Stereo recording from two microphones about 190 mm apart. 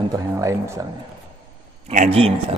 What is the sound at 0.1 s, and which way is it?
Speech, 15° right (ahead or behind).